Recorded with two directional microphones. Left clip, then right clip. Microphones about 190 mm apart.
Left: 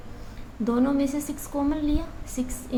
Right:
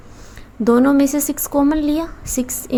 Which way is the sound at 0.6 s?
50° right (ahead or behind).